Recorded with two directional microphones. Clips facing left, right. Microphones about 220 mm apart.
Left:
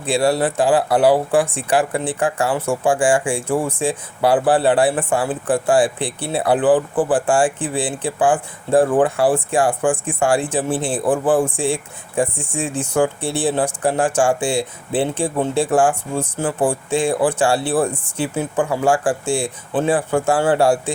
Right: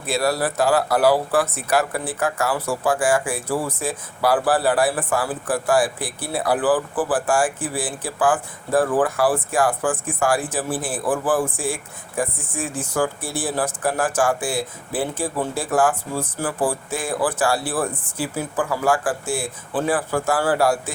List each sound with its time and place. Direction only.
0.0 s speech: 30° left (ahead or behind)